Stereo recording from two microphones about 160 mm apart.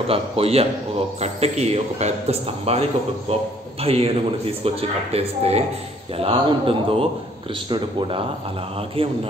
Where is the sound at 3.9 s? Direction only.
40° right (ahead or behind).